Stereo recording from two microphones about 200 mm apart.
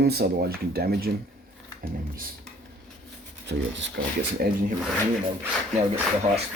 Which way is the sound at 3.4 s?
65° right (ahead or behind).